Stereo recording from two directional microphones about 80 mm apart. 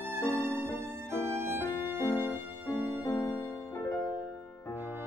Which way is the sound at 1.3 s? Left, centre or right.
Right.